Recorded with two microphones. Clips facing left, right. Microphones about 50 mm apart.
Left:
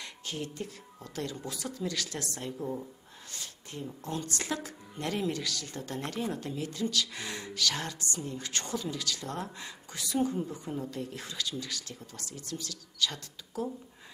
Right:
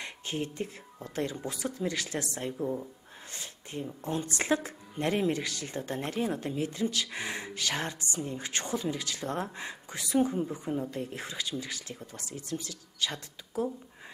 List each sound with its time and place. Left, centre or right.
0.0 s speech: right; by 2.9 s centre
3.8 s speech: right